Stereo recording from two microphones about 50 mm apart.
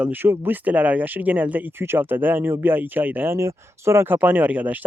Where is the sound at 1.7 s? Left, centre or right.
Right.